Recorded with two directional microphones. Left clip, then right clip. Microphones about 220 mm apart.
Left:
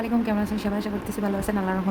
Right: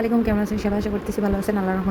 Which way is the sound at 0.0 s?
10° right (ahead or behind).